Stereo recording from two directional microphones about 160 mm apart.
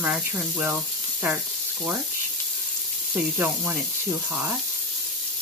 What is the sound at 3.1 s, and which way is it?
Speech, 10° right (ahead or behind).